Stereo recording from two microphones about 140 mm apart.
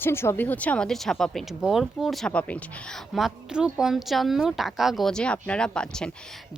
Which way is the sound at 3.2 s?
5° right (ahead or behind).